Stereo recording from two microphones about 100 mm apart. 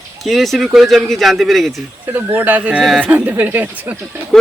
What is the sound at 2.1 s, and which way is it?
Speech, 20° right (ahead or behind).